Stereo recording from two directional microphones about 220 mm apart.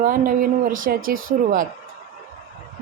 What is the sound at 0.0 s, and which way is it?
A woman's voice, 40° right (ahead or behind).